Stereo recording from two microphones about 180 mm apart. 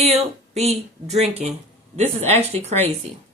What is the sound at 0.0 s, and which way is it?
Speech, 35° right (ahead or behind).